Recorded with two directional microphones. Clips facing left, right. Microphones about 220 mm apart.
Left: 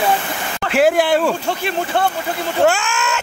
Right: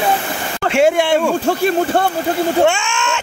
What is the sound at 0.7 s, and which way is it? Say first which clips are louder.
Speech: right 1 dB; centre (ahead or behind).